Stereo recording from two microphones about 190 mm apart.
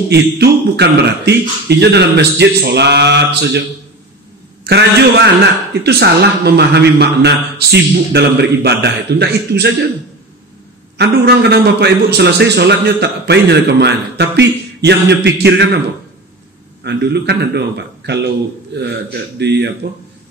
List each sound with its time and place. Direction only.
0.1 s a man's voice: 60° right (ahead or behind)
4.6 s a man's voice: 60° right (ahead or behind)
11.0 s a man's voice: 60° right (ahead or behind)
16.8 s a man's voice: 60° right (ahead or behind)